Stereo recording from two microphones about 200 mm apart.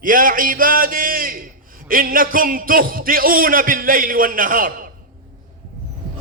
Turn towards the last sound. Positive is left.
turn(degrees=-45)  # may be behind; listen again after turning